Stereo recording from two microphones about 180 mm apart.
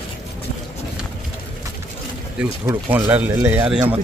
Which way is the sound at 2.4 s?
5° right (ahead or behind).